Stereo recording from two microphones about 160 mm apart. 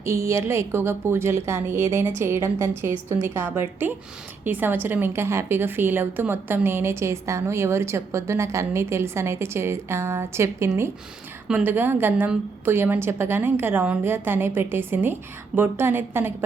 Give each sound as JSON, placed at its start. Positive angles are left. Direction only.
{"t": 0.0, "sound": "a woman's voice", "side_deg": -15}